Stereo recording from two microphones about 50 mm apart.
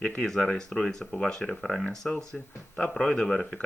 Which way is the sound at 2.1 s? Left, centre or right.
Left.